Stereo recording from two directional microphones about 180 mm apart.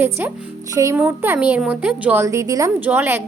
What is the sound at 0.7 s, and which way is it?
A woman's voice, 20° right (ahead or behind).